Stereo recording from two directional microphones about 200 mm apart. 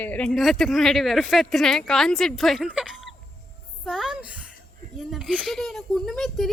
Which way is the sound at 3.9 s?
Centre (ahead or behind).